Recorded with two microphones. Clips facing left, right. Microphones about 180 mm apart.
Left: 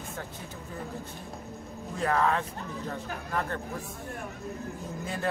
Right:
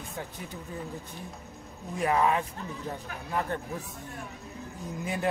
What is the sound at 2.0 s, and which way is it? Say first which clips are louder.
Speech: right 1 dB; 15° right (ahead or behind).